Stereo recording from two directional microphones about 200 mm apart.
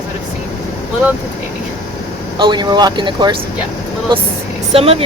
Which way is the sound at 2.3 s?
20° right (ahead or behind).